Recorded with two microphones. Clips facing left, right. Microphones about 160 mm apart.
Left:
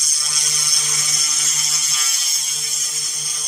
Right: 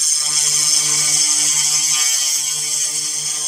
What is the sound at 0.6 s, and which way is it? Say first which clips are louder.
Ratchet: right 2 dB; 35° right (ahead or behind).